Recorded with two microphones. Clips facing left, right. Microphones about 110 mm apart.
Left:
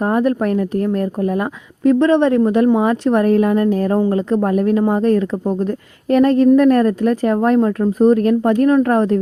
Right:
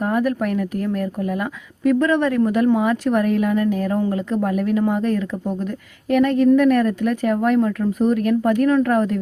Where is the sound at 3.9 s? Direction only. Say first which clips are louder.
Left 5 dB; 30° left (ahead or behind).